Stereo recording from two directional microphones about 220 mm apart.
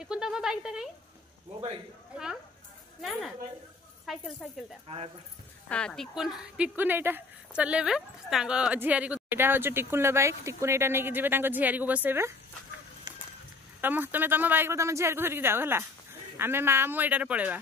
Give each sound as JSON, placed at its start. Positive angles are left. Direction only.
{"t": 0.0, "sound": "speech", "side_deg": -5}
{"t": 3.0, "sound": "a woman's voice", "side_deg": 0}
{"t": 4.8, "sound": "speech", "side_deg": -25}
{"t": 5.7, "sound": "speech", "side_deg": 5}
{"t": 13.1, "sound": "a sound", "side_deg": -15}
{"t": 13.7, "sound": "speech", "side_deg": -10}